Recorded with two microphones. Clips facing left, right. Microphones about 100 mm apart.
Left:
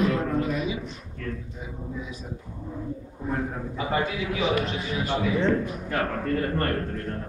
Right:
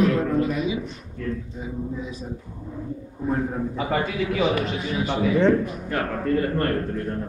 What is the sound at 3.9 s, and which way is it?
Speech, 55° right (ahead or behind).